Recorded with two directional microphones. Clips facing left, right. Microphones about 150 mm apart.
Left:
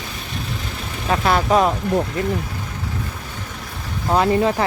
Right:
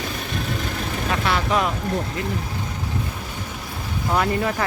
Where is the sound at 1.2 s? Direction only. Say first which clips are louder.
Left 6 dB; 40° left (ahead or behind).